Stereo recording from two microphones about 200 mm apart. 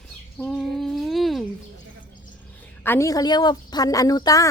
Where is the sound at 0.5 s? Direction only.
Centre (ahead or behind).